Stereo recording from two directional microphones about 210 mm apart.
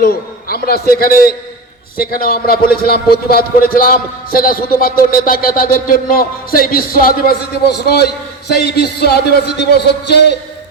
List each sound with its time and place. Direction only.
0.0 s a man's voice: 45° left (ahead or behind)
8.5 s a man's voice: 50° left (ahead or behind)